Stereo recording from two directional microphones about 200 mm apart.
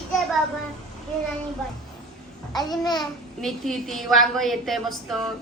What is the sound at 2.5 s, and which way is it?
Speech, 20° left (ahead or behind).